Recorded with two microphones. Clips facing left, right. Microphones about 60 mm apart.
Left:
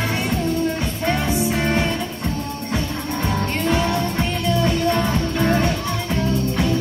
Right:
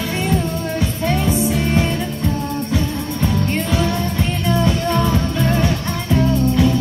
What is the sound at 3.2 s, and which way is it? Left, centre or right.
Music, centre.